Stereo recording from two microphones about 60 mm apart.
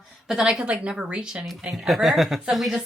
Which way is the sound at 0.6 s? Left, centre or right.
Centre.